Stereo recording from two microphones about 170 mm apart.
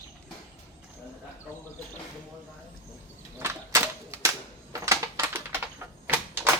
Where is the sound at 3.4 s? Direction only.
15° right (ahead or behind).